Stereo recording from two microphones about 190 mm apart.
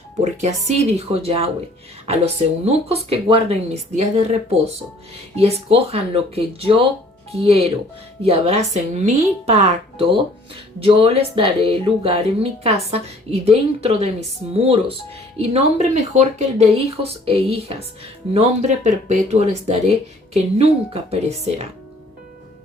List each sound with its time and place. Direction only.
0.2 s speech: 35° right (ahead or behind)